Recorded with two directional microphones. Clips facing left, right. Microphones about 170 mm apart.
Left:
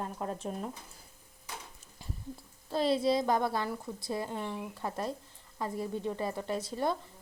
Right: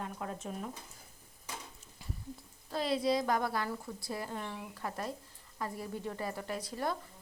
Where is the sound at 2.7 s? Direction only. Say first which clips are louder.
Left 3 dB; 30° left (ahead or behind).